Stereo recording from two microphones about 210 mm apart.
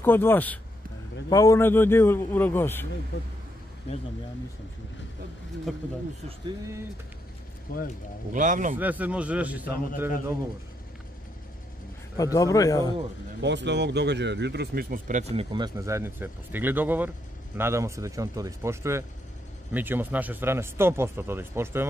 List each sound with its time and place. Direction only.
0.0 s a man's voice: 10° left (ahead or behind)
5.7 s speech: centre (ahead or behind)
7.7 s speech: 45° left (ahead or behind)
8.3 s speech: 40° right (ahead or behind)
8.7 s speech: 10° right (ahead or behind)
12.2 s a man's voice: 15° left (ahead or behind)
13.4 s speech: 55° right (ahead or behind); by 21.8 s 10° right (ahead or behind)